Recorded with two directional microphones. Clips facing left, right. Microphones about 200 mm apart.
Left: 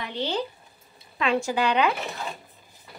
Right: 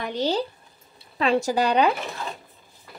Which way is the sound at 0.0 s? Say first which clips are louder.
Right 4 dB; 40° right (ahead or behind).